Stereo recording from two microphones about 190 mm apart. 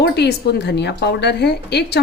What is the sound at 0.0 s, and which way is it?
Speech, 60° left (ahead or behind).